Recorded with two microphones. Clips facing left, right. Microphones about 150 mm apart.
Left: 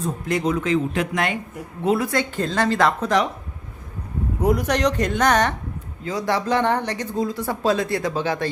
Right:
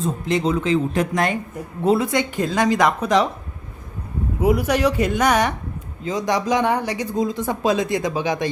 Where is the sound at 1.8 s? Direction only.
25° right (ahead or behind).